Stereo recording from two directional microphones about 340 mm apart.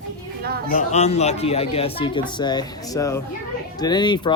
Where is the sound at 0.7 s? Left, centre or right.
Left.